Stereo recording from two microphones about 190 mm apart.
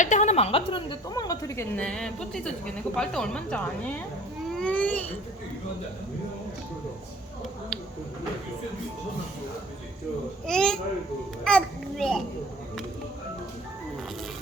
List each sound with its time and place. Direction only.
0.0 s speech: 40° left (ahead or behind); by 4.9 s 5° left (ahead or behind)
10.4 s a child's voice: 5° left (ahead or behind)